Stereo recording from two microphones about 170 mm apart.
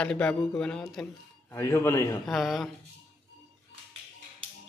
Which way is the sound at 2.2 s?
Centre (ahead or behind).